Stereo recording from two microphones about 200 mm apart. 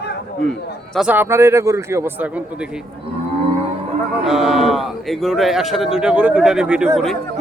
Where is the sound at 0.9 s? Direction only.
5° right (ahead or behind).